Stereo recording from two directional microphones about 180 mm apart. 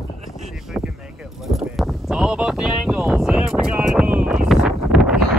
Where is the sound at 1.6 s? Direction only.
Centre (ahead or behind).